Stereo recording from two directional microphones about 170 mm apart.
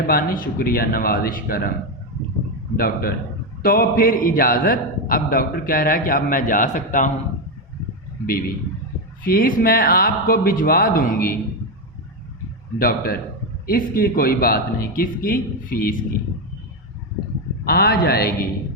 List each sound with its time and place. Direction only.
0.1 s a man's voice: 60° left (ahead or behind)
2.7 s a man's voice: 60° left (ahead or behind)
9.2 s a man's voice: 55° left (ahead or behind)
12.8 s a man's voice: 60° left (ahead or behind)
17.7 s a man's voice: 65° left (ahead or behind)